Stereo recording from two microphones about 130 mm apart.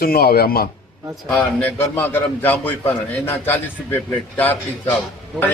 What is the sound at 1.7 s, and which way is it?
A man's voice, 15° left (ahead or behind).